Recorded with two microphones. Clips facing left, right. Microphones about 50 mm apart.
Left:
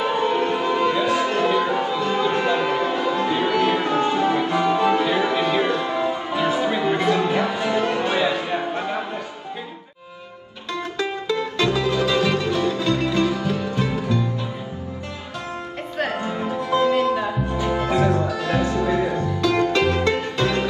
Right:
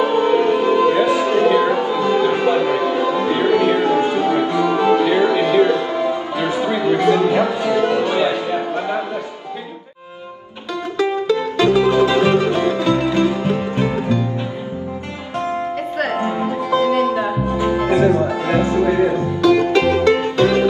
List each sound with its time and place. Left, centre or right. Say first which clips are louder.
0.0 s music: right 6 dB; right
1.2 s music: right 5 dB; right
1.7 s music: right 4 dB; centre
2.0 s music: right 5 dB; right
4.5 s music: right 3 dB; left
4.7 s music: right 4 dB; right
6.7 s music: right 4 dB; left
11.0 s music: right 7 dB; right
16.1 s music: right 5 dB; right